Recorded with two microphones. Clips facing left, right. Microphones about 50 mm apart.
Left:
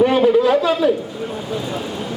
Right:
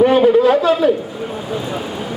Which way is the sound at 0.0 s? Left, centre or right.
Centre.